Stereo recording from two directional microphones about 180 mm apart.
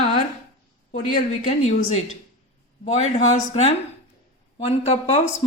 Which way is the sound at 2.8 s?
40° left (ahead or behind).